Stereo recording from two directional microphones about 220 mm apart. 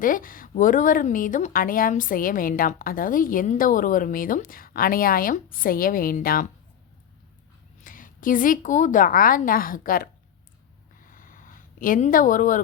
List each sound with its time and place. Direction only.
0.0 s speech: 40° left (ahead or behind)
7.9 s speech: 40° left (ahead or behind)
11.0 s a sound: 40° left (ahead or behind)